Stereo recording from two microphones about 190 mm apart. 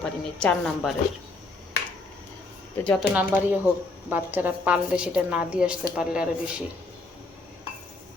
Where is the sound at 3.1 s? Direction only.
10° right (ahead or behind).